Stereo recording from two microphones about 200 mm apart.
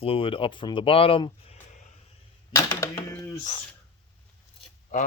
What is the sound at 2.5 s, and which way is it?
Speech, 15° left (ahead or behind).